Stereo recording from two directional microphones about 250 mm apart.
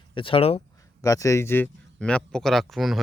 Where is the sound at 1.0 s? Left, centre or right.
Centre.